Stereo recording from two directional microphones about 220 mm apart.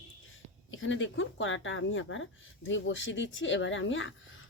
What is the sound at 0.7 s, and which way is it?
Speech, 60° left (ahead or behind).